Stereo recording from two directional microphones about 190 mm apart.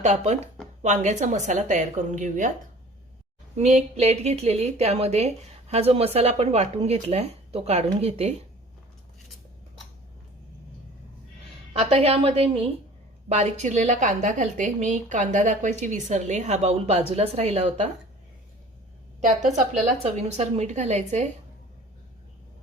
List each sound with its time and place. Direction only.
0.0 s a woman's voice: 40° right (ahead or behind)
3.5 s a woman's voice: 35° right (ahead or behind)
11.7 s a woman's voice: 30° right (ahead or behind)
19.2 s a woman's voice: 40° right (ahead or behind)